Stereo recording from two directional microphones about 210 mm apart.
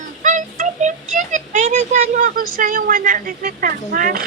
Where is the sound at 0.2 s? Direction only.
35° right (ahead or behind).